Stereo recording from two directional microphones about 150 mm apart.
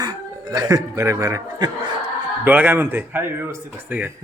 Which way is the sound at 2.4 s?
10° right (ahead or behind).